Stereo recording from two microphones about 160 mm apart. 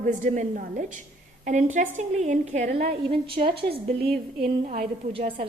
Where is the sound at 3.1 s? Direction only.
35° right (ahead or behind).